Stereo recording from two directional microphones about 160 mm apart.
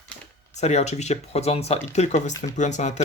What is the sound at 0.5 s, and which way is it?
Speech, 45° left (ahead or behind).